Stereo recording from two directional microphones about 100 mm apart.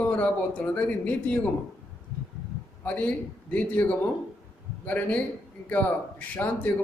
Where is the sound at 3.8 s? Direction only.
15° left (ahead or behind).